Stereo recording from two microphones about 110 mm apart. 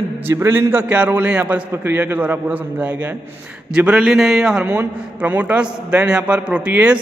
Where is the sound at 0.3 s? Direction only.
25° right (ahead or behind).